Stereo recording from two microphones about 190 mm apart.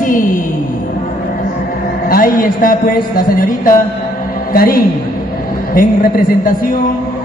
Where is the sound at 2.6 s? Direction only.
45° left (ahead or behind).